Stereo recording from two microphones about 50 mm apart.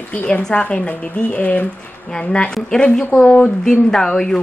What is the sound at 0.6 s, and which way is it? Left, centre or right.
Speech, left.